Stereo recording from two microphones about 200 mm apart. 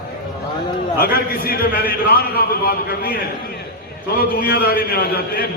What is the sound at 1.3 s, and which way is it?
A man's voice, 50° left (ahead or behind).